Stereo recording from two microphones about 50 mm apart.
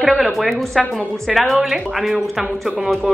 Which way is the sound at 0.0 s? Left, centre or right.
Centre.